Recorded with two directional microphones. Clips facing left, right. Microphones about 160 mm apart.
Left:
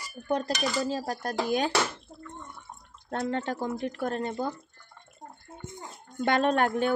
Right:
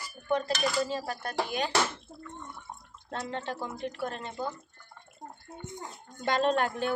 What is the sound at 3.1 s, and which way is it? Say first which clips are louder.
A woman's voice: left 5 dB; 50° left (ahead or behind).